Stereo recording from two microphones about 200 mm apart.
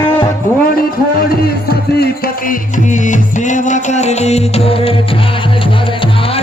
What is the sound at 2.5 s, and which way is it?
Music, 40° left (ahead or behind).